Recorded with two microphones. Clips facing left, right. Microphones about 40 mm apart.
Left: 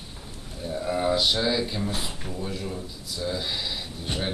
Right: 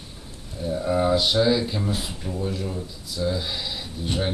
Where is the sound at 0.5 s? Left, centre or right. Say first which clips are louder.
Right 4 dB; centre.